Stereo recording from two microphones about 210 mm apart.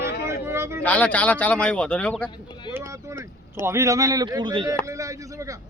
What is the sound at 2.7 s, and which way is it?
Speech, 15° right (ahead or behind).